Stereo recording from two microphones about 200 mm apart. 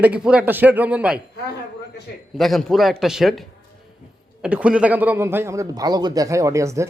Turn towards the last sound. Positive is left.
turn(degrees=-15)  # may be behind; listen again after turning